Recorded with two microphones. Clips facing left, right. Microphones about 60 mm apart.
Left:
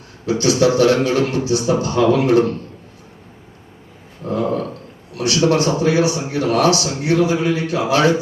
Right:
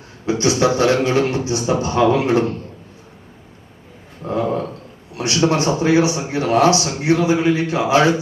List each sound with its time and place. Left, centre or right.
0.3 s a man's voice: right
4.2 s a sound: right
5.1 s a man's voice: right